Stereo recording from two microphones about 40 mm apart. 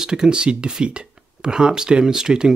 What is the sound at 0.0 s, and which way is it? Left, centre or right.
Speech, right.